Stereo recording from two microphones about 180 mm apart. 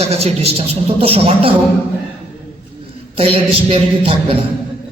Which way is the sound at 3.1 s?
30° right (ahead or behind).